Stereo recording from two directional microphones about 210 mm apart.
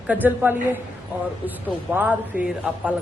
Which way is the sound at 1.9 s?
5° right (ahead or behind).